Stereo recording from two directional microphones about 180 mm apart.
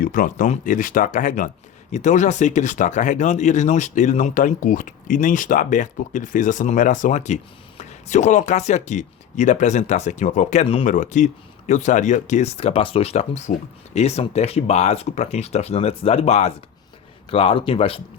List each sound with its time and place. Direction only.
0.0 s speech: 50° left (ahead or behind); by 18.0 s 30° left (ahead or behind)